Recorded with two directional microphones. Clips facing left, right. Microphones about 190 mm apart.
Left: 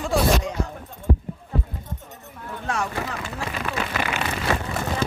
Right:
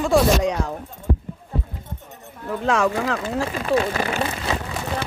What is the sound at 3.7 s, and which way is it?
Speech, 35° right (ahead or behind).